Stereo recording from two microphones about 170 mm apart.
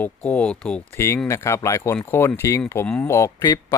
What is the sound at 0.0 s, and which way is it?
Speech, 10° left (ahead or behind).